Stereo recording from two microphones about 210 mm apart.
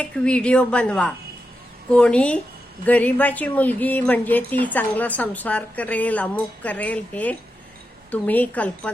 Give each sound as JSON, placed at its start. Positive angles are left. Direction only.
{"t": 0.0, "sound": "a woman's voice", "side_deg": 5}